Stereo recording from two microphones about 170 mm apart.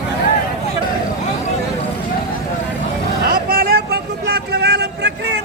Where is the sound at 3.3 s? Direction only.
60° right (ahead or behind); by 5.3 s 90° right.